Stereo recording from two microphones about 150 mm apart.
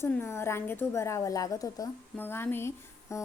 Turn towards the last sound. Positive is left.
turn(degrees=20)  # may be behind; listen again after turning